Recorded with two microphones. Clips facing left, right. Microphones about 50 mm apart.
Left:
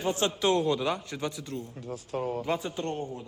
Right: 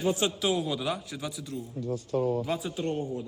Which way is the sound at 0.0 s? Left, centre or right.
Left.